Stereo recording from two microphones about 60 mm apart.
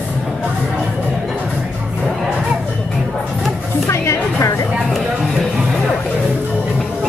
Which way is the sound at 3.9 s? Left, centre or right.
Left.